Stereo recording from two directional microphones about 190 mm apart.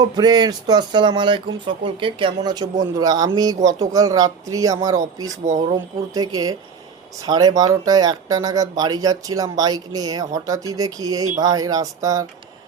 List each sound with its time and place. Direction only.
0.2 s speech: 20° right (ahead or behind)
5.5 s speech: 40° right (ahead or behind)
5.7 s speech: 20° right (ahead or behind)